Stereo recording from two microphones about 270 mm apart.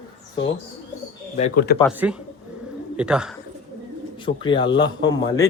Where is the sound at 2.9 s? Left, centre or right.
Centre.